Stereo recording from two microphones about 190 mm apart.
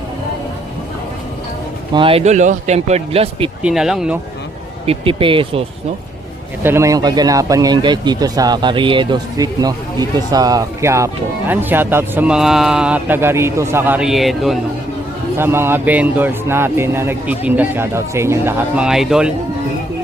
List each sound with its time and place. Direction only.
1.9 s speech: 25° right (ahead or behind)
3.6 s speech: 5° right (ahead or behind)
4.9 s speech: 30° right (ahead or behind)
6.6 s speech: 15° right (ahead or behind)
15.4 s speech: 10° right (ahead or behind)